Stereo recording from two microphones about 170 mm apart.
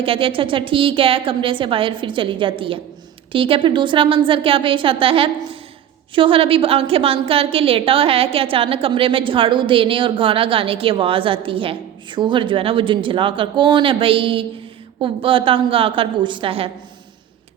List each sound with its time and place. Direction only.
0.0 s a woman's voice: 30° right (ahead or behind)